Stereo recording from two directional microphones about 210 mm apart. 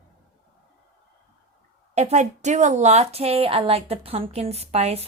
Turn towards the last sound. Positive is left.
turn(degrees=-30)  # may be behind; listen again after turning